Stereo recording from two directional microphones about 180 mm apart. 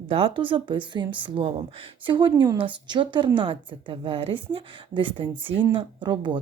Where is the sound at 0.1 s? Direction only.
30° right (ahead or behind).